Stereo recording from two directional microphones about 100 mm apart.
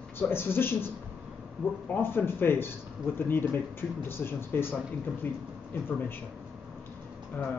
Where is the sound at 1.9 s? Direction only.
20° left (ahead or behind).